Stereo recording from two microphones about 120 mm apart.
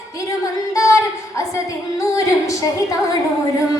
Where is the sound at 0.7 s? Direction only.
25° left (ahead or behind).